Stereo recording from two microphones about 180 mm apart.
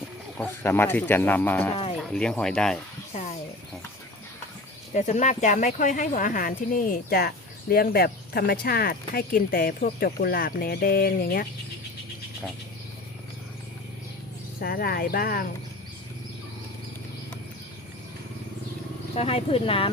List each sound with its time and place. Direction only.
0.3 s speech: 10° left (ahead or behind)
3.1 s a sound: 40° left (ahead or behind)
4.9 s speech: 40° left (ahead or behind)
14.6 s speech: 55° left (ahead or behind)
19.1 s speech: 35° left (ahead or behind)